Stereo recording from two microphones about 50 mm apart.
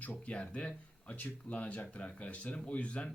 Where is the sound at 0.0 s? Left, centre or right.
Left.